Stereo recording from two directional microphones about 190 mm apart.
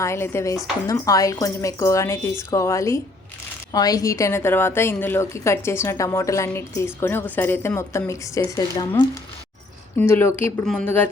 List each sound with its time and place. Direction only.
0.0 s a woman's voice: 15° left (ahead or behind)